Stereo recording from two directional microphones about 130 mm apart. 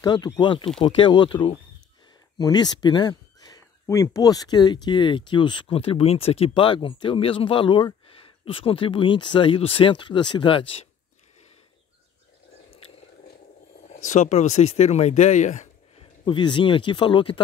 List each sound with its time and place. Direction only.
0.0 s speech: 35° left (ahead or behind)
2.3 s speech: 30° left (ahead or behind); by 10.9 s 45° left (ahead or behind)
13.9 s speech: 70° left (ahead or behind)
16.0 s speech: 35° left (ahead or behind)